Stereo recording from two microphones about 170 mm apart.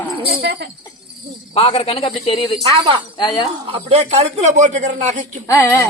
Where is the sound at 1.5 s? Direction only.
35° left (ahead or behind).